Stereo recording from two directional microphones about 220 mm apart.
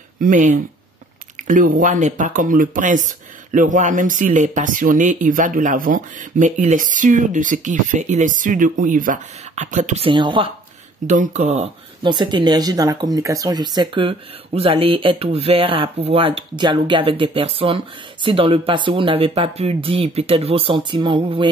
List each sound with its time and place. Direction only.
0.2 s speech: 35° right (ahead or behind); by 10.5 s 20° right (ahead or behind)
11.1 s speech: 35° right (ahead or behind)